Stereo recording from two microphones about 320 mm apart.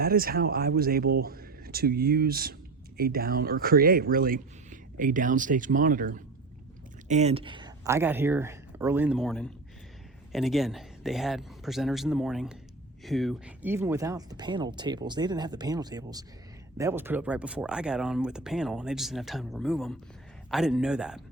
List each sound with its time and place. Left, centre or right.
0.0 s speech: right; by 21.2 s centre